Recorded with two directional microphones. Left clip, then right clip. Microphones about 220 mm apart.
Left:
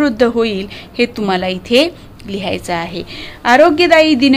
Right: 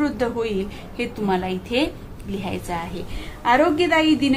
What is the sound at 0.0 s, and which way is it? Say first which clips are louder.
A woman's voice: left 10 dB; 45° left (ahead or behind).